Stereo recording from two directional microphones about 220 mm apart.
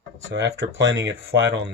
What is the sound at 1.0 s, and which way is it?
Speech, 55° right (ahead or behind).